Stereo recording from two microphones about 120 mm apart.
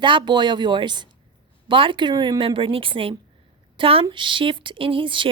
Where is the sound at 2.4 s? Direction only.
45° right (ahead or behind).